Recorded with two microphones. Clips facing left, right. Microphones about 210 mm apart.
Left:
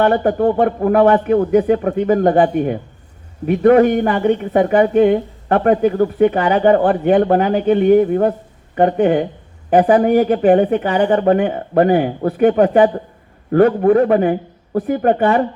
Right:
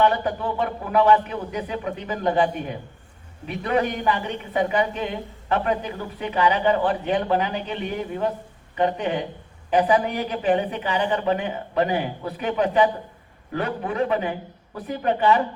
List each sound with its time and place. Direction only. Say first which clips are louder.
0.0 s a woman's voice: left 8 dB; 50° left (ahead or behind)